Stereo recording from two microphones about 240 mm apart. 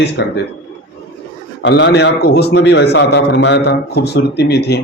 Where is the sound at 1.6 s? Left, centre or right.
Left.